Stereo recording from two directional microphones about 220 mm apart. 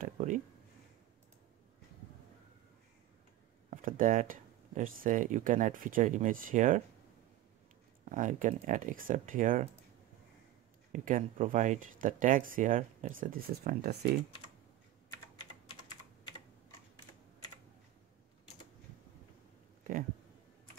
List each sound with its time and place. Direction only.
0.0 s speech: 35° right (ahead or behind)
3.7 s speech: 35° right (ahead or behind)
8.0 s speech: 35° right (ahead or behind)
10.9 s speech: 35° right (ahead or behind)
15.0 s typing: 20° left (ahead or behind)